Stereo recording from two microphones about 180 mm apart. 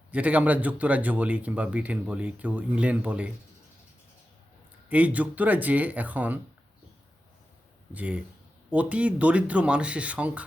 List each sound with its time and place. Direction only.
0.1 s speech: 10° right (ahead or behind)
4.9 s speech: 10° right (ahead or behind)
7.9 s speech: 5° right (ahead or behind)